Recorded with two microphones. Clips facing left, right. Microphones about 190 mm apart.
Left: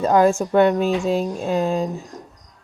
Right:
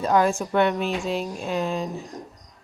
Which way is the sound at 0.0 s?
40° left (ahead or behind).